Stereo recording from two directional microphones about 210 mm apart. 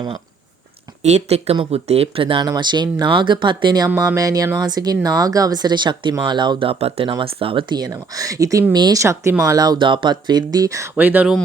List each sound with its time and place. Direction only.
1.0 s speech: 30° right (ahead or behind); by 11.3 s 5° right (ahead or behind)